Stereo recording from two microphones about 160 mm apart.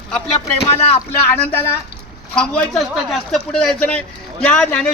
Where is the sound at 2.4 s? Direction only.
5° left (ahead or behind).